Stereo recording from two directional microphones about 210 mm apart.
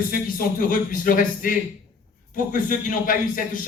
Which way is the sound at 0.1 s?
40° left (ahead or behind).